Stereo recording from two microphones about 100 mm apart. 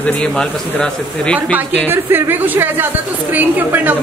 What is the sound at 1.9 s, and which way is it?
A woman's voice, 20° right (ahead or behind).